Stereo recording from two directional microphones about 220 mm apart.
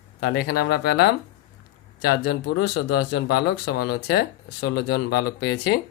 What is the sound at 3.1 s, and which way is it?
Speech, 50° left (ahead or behind).